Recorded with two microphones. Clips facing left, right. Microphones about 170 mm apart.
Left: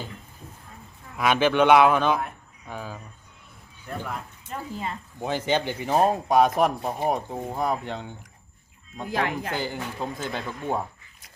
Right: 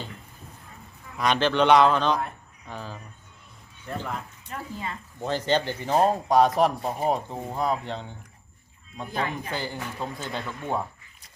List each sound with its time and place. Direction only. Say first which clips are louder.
1.2 s speech: left 2 dB; 10° left (ahead or behind)
4.4 s speech: left 4 dB; 30° left (ahead or behind)
5.2 s speech: even; 15° left (ahead or behind)
9.0 s speech: left 3 dB; 90° left
9.6 s speech: left 2 dB; 15° left (ahead or behind)